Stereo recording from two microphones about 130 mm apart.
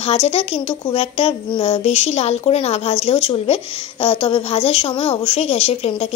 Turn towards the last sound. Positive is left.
turn(degrees=50)  # may be behind; listen again after turning